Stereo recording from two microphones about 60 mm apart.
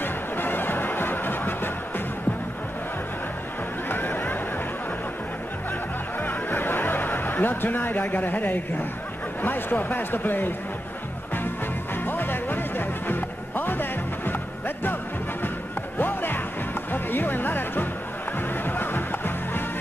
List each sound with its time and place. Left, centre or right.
0.0 s a sound: left
3.9 s a sound: left
6.2 s snicker: left
9.4 s speech: left
12.1 s music: left
16.0 s music: left